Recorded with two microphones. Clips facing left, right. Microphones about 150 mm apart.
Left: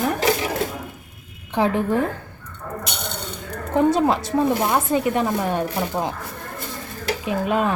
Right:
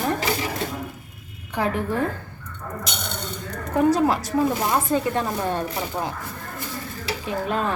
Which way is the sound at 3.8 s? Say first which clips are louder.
Left 1 dB; 25° left (ahead or behind).